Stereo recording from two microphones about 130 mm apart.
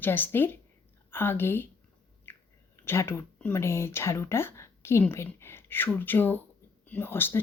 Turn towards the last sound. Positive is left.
turn(degrees=15)  # may be behind; listen again after turning